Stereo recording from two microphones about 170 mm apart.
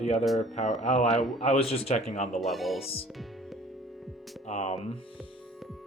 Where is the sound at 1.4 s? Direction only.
40° left (ahead or behind).